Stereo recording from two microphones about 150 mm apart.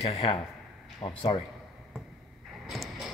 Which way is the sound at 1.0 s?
30° left (ahead or behind).